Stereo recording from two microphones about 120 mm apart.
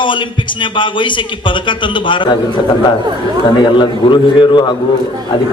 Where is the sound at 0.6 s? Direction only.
45° left (ahead or behind).